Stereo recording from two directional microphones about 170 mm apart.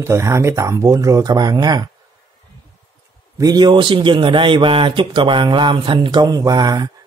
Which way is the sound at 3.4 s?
25° right (ahead or behind).